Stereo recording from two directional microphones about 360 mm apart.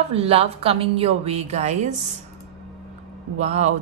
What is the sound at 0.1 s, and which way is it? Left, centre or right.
Speech, centre.